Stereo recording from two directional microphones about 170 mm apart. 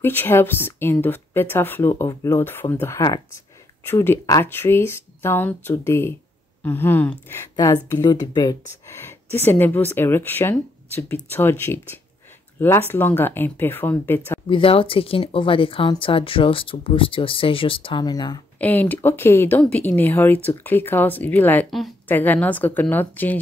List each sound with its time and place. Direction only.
0.0 s a woman's voice: 10° left (ahead or behind)
9.0 s speech: 15° left (ahead or behind)
14.5 s speech: 30° left (ahead or behind)
18.6 s a woman's voice: 10° left (ahead or behind)
22.0 s speech: 10° left (ahead or behind)